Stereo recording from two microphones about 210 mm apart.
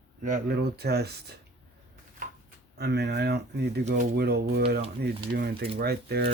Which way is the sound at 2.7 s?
50° right (ahead or behind).